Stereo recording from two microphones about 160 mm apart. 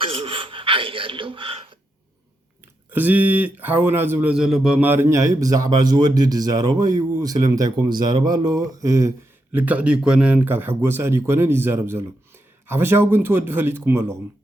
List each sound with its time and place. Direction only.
0.0 s gasp: 35° right (ahead or behind)
2.9 s a man's voice: 10° right (ahead or behind)